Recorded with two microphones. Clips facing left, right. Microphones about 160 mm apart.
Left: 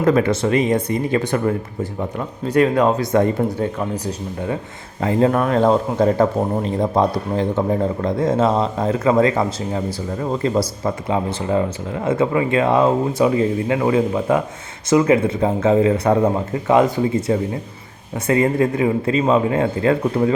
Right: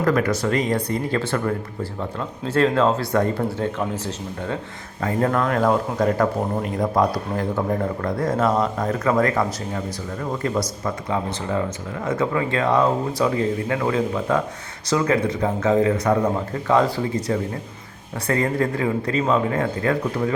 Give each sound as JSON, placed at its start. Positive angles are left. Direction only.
{"t": 0.0, "sound": "speech", "side_deg": 25}
{"t": 11.1, "sound": "speech", "side_deg": 20}